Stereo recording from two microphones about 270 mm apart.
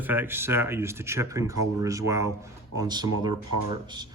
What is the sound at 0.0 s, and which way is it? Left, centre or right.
Speech, centre.